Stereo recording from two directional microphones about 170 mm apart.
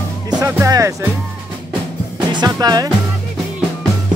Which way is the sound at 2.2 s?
25° right (ahead or behind).